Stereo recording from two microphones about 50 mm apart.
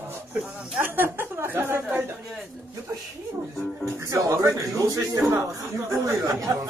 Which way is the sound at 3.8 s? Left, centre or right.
Right.